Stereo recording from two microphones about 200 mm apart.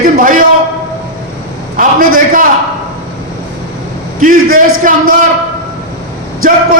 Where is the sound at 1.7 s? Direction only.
45° right (ahead or behind).